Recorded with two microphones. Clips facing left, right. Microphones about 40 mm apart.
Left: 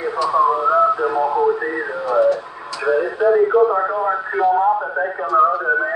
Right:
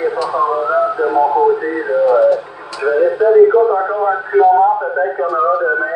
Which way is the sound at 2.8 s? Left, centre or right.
Centre.